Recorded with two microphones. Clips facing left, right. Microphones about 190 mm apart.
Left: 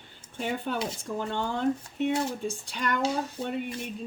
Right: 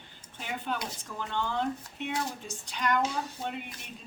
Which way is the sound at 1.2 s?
45° left (ahead or behind).